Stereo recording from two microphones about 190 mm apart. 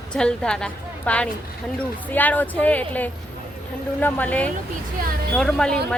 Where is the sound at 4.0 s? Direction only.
10° left (ahead or behind).